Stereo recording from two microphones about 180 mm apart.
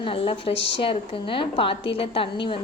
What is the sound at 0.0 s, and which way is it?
A woman's voice, 30° left (ahead or behind).